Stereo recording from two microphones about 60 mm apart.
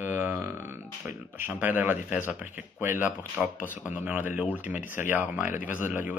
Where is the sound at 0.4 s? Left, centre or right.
Right.